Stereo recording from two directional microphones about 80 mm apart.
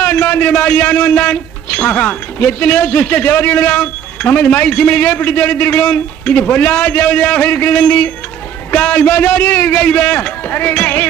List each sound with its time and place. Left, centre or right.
0.0 s a man's voice: centre